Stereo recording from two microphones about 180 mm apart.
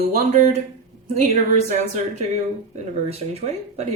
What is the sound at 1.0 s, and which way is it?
A woman's voice, 40° right (ahead or behind).